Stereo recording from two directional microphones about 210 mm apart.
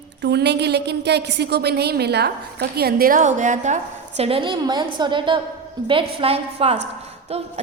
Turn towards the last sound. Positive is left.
turn(degrees=-30)  # may be behind; listen again after turning